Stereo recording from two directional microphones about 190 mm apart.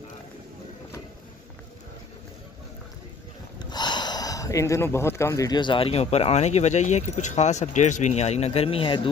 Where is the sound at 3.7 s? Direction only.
20° left (ahead or behind).